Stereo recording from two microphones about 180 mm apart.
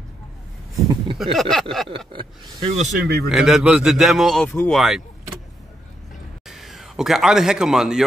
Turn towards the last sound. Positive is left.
turn(degrees=0)  # may be behind; listen again after turning